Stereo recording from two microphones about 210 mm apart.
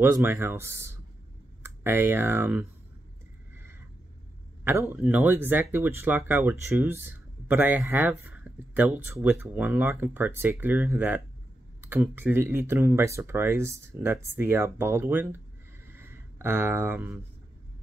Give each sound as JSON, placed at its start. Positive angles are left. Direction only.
{"t": 0.0, "sound": "speech", "side_deg": -10}
{"t": 4.6, "sound": "speech", "side_deg": -10}
{"t": 15.9, "sound": "a sound", "side_deg": -10}